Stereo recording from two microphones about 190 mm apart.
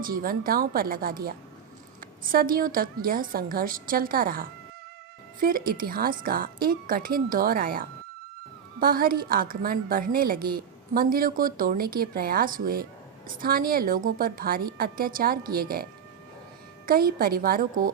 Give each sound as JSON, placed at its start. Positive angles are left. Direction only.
{"t": 0.0, "sound": "speech", "side_deg": -50}